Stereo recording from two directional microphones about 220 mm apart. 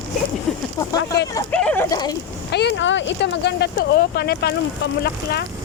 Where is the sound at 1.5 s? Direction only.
5° left (ahead or behind).